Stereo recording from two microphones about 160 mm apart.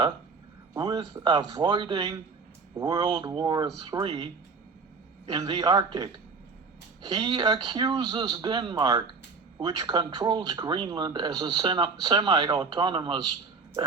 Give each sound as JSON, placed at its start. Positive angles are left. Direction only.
{"t": 0.8, "sound": "speech", "side_deg": -25}
{"t": 5.3, "sound": "speech", "side_deg": -25}